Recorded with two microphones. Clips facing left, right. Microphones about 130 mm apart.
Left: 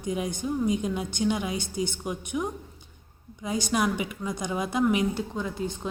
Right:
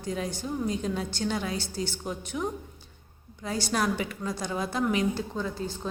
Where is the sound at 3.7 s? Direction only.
10° left (ahead or behind).